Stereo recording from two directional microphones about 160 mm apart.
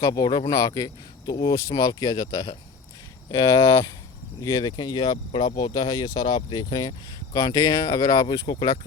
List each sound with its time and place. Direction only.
0.0 s speech: 25° left (ahead or behind)